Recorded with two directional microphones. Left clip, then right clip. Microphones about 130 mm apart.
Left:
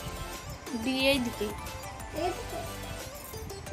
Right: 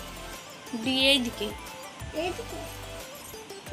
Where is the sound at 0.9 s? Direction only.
20° left (ahead or behind).